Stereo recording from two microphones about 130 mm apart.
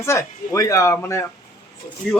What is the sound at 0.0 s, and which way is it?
Speech, 20° left (ahead or behind).